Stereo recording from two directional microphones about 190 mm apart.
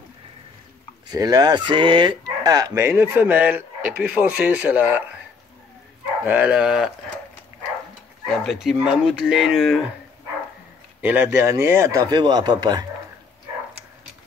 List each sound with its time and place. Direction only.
1.0 s speech: 20° right (ahead or behind)
6.2 s speech: 10° right (ahead or behind)
8.5 s speech: centre (ahead or behind)
11.0 s speech: 10° right (ahead or behind)